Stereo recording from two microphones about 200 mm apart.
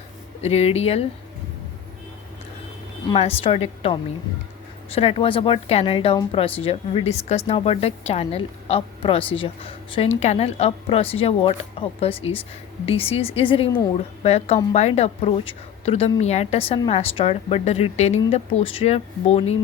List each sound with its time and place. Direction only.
0.4 s a woman's voice: 30° left (ahead or behind)
3.1 s speech: 30° left (ahead or behind)
4.9 s a woman's voice: 30° left (ahead or behind)